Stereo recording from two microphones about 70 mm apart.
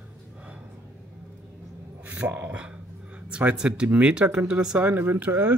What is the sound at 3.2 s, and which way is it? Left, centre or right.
Speech, centre.